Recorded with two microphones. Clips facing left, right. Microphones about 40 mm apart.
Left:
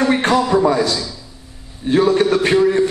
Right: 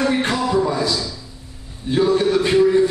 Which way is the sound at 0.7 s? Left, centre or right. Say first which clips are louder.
Left 5 dB; left.